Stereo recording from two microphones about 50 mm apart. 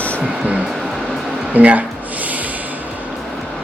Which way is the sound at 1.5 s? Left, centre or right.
Right.